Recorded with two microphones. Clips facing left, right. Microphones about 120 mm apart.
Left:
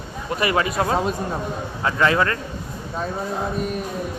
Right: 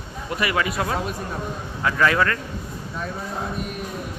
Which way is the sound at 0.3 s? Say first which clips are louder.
Left 3 dB; 30° left (ahead or behind).